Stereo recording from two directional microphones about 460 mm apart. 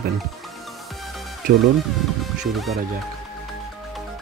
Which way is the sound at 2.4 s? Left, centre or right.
Centre.